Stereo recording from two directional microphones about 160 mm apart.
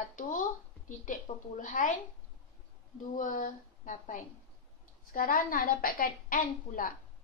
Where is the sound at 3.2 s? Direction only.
55° left (ahead or behind).